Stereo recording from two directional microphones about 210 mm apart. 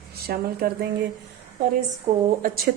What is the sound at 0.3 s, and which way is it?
Speech, 45° right (ahead or behind).